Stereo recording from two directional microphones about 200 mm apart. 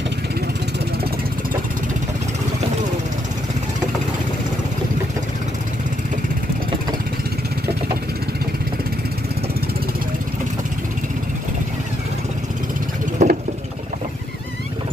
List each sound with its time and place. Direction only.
13.2 s vehicle: 35° right (ahead or behind)